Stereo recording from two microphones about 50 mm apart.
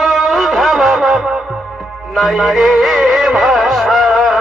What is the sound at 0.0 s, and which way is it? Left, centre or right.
Music, centre.